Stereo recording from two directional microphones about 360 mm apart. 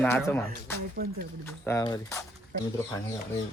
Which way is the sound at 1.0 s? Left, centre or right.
Right.